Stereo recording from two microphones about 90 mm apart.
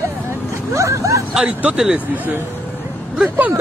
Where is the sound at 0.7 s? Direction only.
35° right (ahead or behind).